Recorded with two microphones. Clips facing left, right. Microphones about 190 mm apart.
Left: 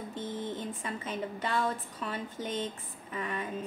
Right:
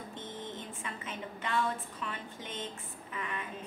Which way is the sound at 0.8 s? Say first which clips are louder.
Left 5 dB; 35° left (ahead or behind).